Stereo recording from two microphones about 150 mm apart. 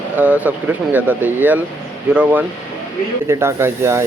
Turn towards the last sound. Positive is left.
turn(degrees=-15)  # may be behind; listen again after turning